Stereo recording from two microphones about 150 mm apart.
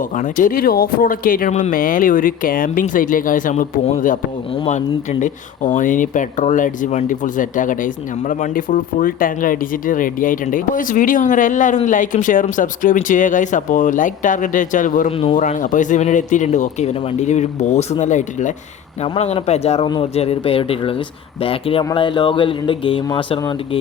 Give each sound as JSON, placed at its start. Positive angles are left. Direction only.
{"t": 0.2, "sound": "speech", "side_deg": 60}
{"t": 1.5, "sound": "speech", "side_deg": 55}
{"t": 5.2, "sound": "speech", "side_deg": 55}